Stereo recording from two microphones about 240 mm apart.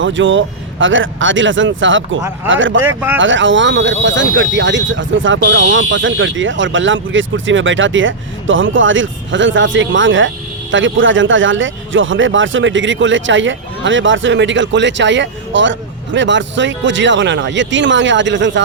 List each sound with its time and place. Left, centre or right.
0.0 s speech: right